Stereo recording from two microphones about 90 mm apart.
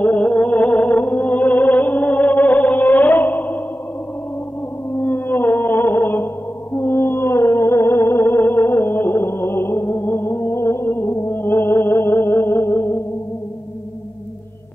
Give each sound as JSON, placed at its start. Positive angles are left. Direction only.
{"t": 0.0, "sound": "music", "side_deg": 15}
{"t": 4.9, "sound": "music", "side_deg": 25}